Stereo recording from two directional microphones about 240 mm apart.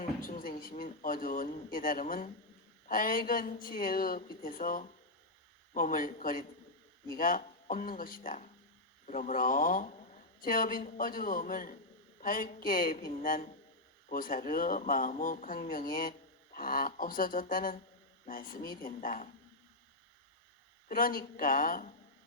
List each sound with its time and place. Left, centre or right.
0.2 s speech: left
20.8 s speech: left